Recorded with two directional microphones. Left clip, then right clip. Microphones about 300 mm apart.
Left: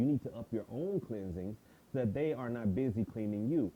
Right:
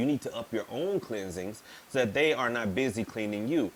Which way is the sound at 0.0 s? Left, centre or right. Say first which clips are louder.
Right 5 dB; centre.